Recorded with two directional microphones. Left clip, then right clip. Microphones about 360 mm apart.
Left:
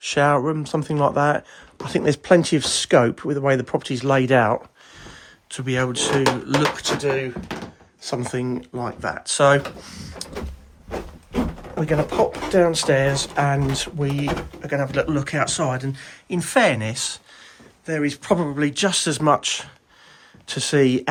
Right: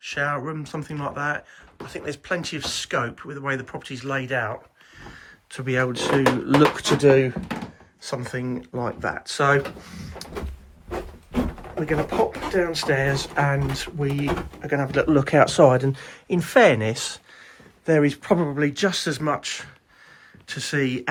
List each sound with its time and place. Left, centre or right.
0.0 s speech: centre
5.0 s speech: centre
6.7 s speech: centre
8.0 s speech: centre
10.2 s cupboard open or close: centre
11.9 s speech: centre